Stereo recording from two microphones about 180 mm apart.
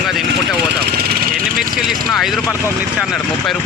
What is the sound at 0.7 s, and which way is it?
Vehicle, 65° right (ahead or behind).